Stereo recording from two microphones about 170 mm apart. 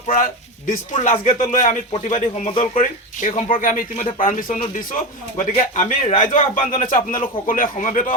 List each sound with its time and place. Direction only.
0.7 s speech: 50° left (ahead or behind)
5.5 s speech: 40° left (ahead or behind)